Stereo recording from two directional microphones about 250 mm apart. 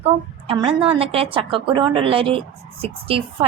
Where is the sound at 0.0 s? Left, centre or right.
Centre.